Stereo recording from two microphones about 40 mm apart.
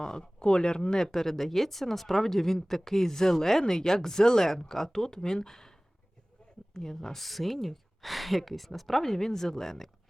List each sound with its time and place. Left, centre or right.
0.0 s speech: centre
1.0 s speech: centre
6.7 s a woman's voice: centre